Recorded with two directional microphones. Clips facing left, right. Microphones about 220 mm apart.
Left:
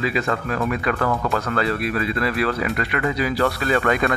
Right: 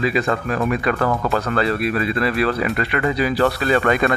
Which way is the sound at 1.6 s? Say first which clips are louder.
Right 3 dB; 30° right (ahead or behind).